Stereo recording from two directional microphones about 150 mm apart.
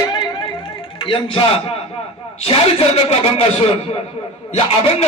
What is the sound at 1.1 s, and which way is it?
A man's voice, 35° left (ahead or behind).